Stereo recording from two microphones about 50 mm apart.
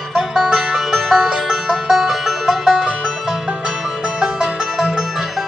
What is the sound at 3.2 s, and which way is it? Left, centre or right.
Music, centre.